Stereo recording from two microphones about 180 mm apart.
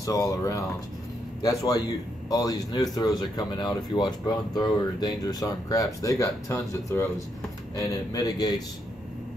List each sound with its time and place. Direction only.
0.0 s a man's voice: 20° left (ahead or behind)